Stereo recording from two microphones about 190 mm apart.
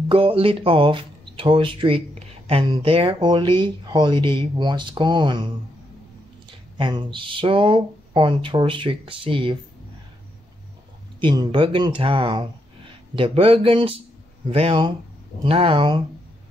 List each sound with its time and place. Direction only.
0.1 s speech: 30° right (ahead or behind)
6.8 s speech: 25° right (ahead or behind)
11.1 s speech: 25° right (ahead or behind)